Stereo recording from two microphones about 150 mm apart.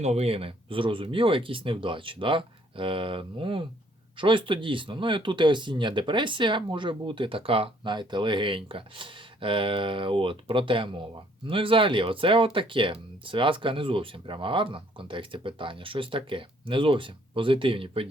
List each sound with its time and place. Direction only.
0.0 s speech: 45° right (ahead or behind)